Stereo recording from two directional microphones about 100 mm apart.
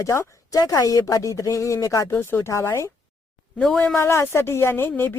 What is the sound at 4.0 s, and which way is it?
A woman's voice, 25° left (ahead or behind).